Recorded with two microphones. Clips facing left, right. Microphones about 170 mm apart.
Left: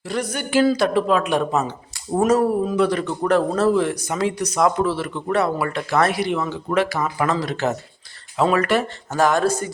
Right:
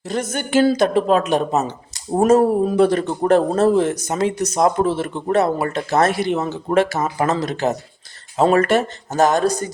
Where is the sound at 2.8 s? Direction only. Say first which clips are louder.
Right 4 dB; 45° right (ahead or behind).